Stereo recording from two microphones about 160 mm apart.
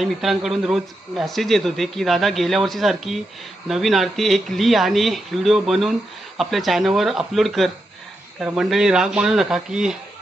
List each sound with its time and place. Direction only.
0.0 s speech: centre (ahead or behind)